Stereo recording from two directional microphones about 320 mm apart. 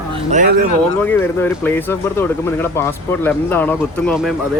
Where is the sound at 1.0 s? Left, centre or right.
Centre.